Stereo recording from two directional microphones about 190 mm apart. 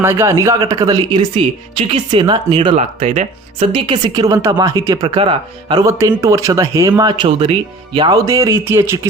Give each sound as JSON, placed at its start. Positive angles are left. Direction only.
{"t": 0.0, "sound": "speech", "side_deg": -15}